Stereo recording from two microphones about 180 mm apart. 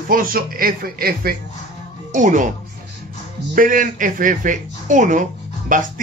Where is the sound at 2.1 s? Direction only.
45° right (ahead or behind).